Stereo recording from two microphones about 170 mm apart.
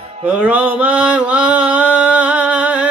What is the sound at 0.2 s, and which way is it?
Mantra, 10° right (ahead or behind).